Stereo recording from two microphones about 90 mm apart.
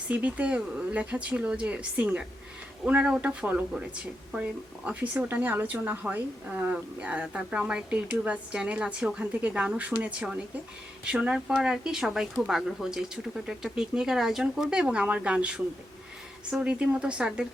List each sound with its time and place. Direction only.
0.1 s a woman's voice: 15° right (ahead or behind)